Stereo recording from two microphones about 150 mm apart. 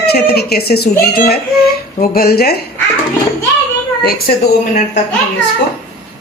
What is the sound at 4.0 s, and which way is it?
Speech, 90° left.